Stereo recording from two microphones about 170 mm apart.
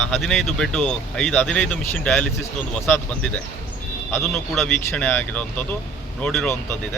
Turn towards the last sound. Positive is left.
turn(degrees=10)  # may be behind; listen again after turning